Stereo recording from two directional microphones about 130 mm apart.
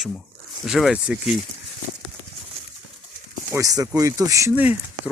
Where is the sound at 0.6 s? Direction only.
Centre (ahead or behind).